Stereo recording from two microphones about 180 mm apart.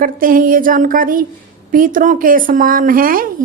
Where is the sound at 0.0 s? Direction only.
50° right (ahead or behind).